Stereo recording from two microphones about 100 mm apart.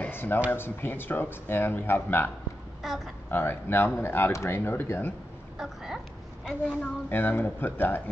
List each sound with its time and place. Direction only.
0.0 s a sound: 20° left (ahead or behind)
0.5 s speech: 20° left (ahead or behind)
2.8 s speech: centre (ahead or behind)
3.3 s speech: 20° left (ahead or behind)
5.6 s speech: 5° right (ahead or behind)
6.8 s speech: 20° left (ahead or behind)